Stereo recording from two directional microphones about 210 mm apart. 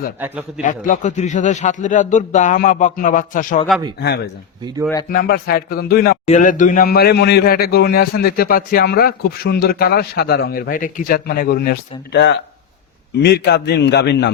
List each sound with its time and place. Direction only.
0.2 s a man's voice: 10° right (ahead or behind)
0.6 s a man's voice: 40° left (ahead or behind)
5.0 s a man's voice: 45° left (ahead or behind)
6.2 s a man's voice: 35° left (ahead or behind); by 14.3 s 55° left (ahead or behind)